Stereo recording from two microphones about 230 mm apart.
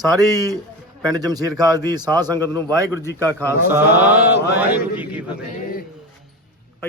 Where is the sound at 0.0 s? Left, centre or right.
Centre.